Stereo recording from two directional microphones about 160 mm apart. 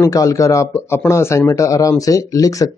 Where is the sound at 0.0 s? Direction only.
20° left (ahead or behind).